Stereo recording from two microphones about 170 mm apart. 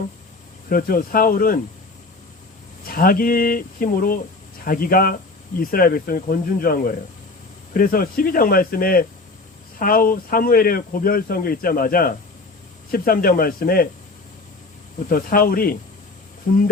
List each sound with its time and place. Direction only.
0.7 s speech: 55° left (ahead or behind)
2.8 s speech: 60° left (ahead or behind)
15.1 s speech: 60° left (ahead or behind)
16.5 s a sound: 55° left (ahead or behind)